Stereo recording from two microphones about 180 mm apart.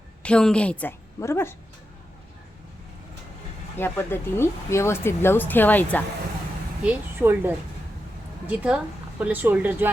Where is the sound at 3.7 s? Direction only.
10° left (ahead or behind).